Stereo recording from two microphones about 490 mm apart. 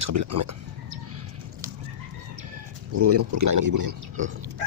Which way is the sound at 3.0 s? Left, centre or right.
Right.